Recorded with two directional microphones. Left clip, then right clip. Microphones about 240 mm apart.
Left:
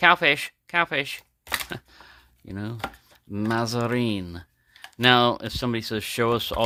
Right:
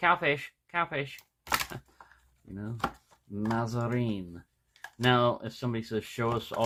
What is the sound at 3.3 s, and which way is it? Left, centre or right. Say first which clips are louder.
Speech: left 7 dB; left.